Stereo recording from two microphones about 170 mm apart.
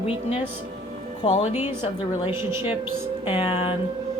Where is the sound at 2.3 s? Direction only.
15° right (ahead or behind).